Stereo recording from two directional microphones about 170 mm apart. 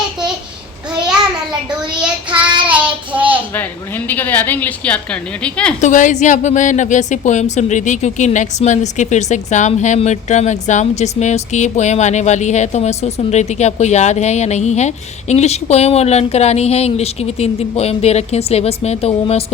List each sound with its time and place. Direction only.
2.0 s child singing: 5° right (ahead or behind)
4.1 s a woman's voice: 10° left (ahead or behind)
5.8 s speech: 45° left (ahead or behind)